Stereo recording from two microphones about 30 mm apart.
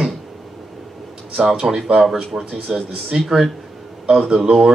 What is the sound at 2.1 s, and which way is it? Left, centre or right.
Speech, right.